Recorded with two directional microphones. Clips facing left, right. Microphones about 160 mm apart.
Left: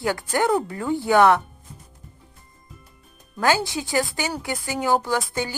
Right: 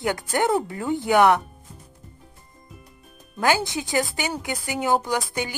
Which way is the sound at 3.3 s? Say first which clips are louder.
Left 1 dB; 20° right (ahead or behind).